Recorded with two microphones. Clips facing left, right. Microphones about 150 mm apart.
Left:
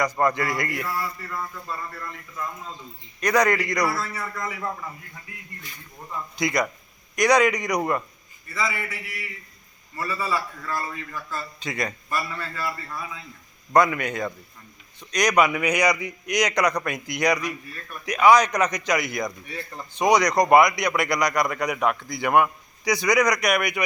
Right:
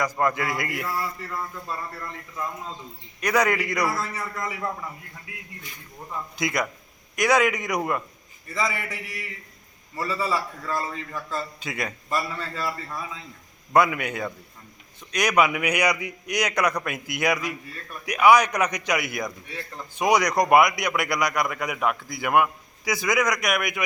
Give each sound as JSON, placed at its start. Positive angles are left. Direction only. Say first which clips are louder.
{"t": 0.0, "sound": "a man's voice", "louder": "left 2 dB", "side_deg": -5}
{"t": 3.2, "sound": "a man's voice", "louder": "left 2 dB", "side_deg": -5}
{"t": 6.3, "sound": "a man's voice", "louder": "left 3 dB", "side_deg": -5}
{"t": 9.9, "sound": "a man's voice", "louder": "right 1 dB", "side_deg": -25}
{"t": 11.6, "sound": "a man's voice", "louder": "left 2 dB", "side_deg": -5}
{"t": 12.0, "sound": "a man's voice", "louder": "right 1 dB", "side_deg": -25}
{"t": 13.7, "sound": "a man's voice", "louder": "left 1 dB", "side_deg": -10}